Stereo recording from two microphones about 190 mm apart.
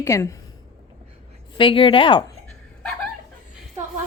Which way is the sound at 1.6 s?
25° left (ahead or behind).